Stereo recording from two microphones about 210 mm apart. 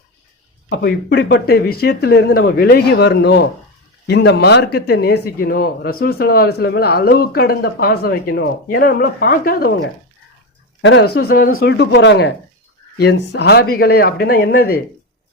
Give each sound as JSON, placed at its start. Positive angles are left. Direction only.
{"t": 0.7, "sound": "speech", "side_deg": 50}
{"t": 10.8, "sound": "speech", "side_deg": 60}